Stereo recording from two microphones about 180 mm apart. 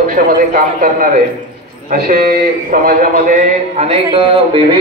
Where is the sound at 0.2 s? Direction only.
50° right (ahead or behind); by 4.7 s 30° right (ahead or behind).